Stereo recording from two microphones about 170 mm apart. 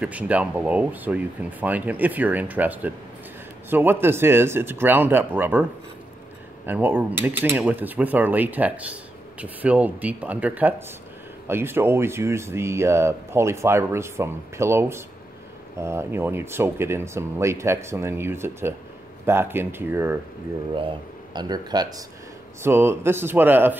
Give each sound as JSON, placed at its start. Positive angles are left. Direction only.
{"t": 0.0, "sound": "speech", "side_deg": -10}
{"t": 20.7, "sound": "speech", "side_deg": -30}